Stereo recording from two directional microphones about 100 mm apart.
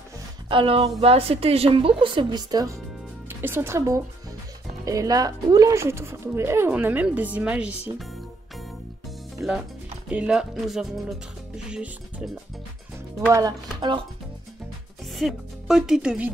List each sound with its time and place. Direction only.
0.5 s a woman's voice: 65° right (ahead or behind); by 2.8 s 35° right (ahead or behind)
3.3 s speech: 20° right (ahead or behind)
9.4 s speech: 15° right (ahead or behind)
13.3 s speech: 40° right (ahead or behind)
15.1 s speech: 5° right (ahead or behind)